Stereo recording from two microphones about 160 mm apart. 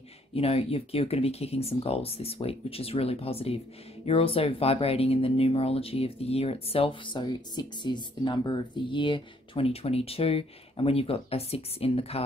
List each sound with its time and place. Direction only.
0.3 s speech: 40° left (ahead or behind)